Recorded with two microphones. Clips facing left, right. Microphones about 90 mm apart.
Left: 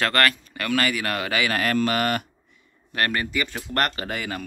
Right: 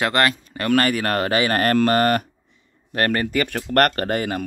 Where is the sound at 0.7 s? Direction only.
40° right (ahead or behind).